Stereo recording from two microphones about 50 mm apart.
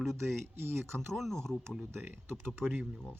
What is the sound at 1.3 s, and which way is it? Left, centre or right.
Speech, centre.